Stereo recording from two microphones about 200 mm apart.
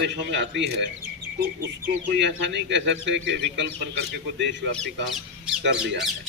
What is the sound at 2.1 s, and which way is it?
A man's voice, 60° right (ahead or behind).